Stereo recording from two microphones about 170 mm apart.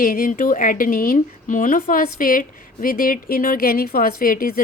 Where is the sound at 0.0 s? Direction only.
50° left (ahead or behind).